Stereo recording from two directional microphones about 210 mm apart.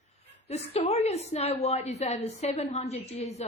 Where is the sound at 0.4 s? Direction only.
30° left (ahead or behind).